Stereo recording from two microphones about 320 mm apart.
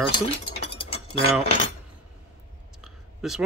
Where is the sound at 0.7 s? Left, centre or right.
Centre.